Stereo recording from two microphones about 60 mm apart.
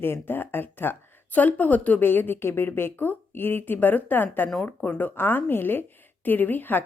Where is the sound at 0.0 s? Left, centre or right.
Left.